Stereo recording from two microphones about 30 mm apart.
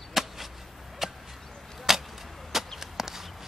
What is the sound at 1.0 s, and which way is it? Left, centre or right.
Arrow, centre.